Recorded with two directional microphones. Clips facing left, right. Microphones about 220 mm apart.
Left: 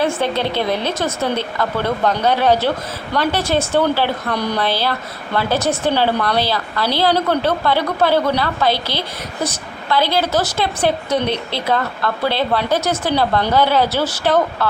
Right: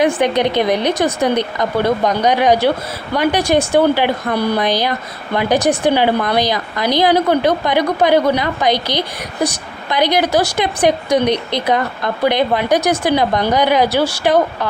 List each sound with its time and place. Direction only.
0.0 s a woman's voice: 15° right (ahead or behind)